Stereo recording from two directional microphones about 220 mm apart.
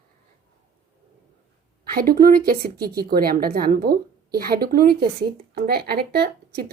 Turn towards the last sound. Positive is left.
turn(degrees=-45)  # may be behind; listen again after turning